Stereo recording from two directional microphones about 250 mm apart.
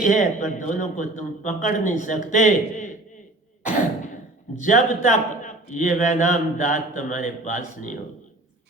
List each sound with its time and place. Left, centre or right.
0.0 s a man's voice: left
4.6 s a man's voice: left